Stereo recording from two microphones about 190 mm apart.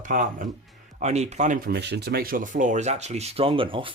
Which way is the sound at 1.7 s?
60° right (ahead or behind).